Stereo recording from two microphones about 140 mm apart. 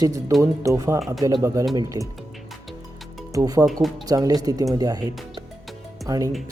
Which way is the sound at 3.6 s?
Centre (ahead or behind).